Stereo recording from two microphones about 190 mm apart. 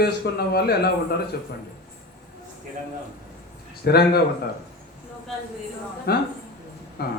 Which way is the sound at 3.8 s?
55° left (ahead or behind).